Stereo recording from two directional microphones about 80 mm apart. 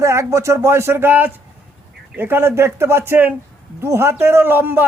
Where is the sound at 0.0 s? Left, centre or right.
Right.